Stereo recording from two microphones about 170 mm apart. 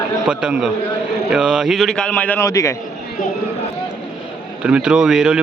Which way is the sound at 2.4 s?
20° left (ahead or behind).